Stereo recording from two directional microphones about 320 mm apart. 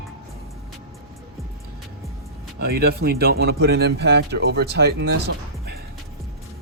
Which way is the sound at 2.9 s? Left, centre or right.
Right.